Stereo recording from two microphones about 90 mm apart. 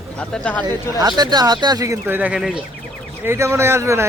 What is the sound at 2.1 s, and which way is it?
Speech, 15° right (ahead or behind).